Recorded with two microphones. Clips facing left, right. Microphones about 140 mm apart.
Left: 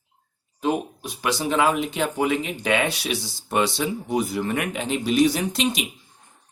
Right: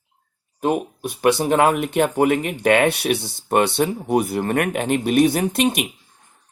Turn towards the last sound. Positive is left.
turn(degrees=-55)  # may be behind; listen again after turning